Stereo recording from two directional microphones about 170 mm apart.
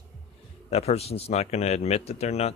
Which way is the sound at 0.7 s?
35° left (ahead or behind).